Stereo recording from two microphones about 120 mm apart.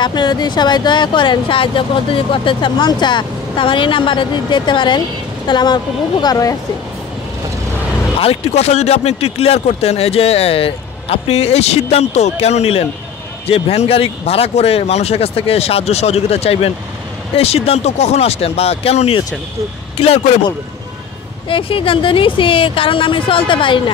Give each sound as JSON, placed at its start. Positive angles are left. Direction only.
{"t": 0.0, "sound": "speech", "side_deg": 35}
{"t": 8.2, "sound": "speech", "side_deg": 55}
{"t": 21.5, "sound": "speech", "side_deg": 45}